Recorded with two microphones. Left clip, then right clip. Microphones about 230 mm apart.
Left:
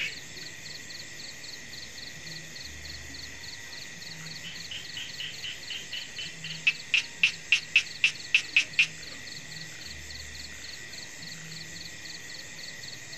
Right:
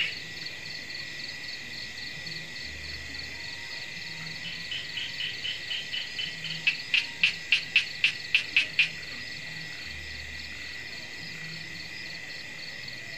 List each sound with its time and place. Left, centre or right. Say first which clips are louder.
6.6 s cricket: even; left